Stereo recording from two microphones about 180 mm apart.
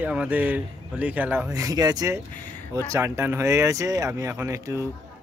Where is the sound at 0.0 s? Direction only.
5° right (ahead or behind).